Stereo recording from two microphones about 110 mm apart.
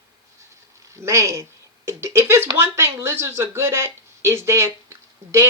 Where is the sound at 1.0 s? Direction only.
25° right (ahead or behind).